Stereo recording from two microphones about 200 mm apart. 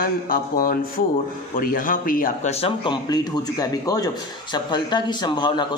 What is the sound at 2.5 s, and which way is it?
Speech, 25° left (ahead or behind).